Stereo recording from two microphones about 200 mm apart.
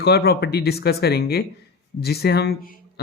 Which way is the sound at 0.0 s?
55° left (ahead or behind).